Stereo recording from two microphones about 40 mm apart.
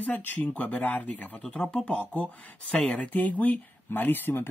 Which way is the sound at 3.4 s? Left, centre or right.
Left.